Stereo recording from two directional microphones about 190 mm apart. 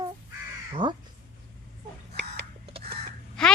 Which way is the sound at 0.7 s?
25° right (ahead or behind).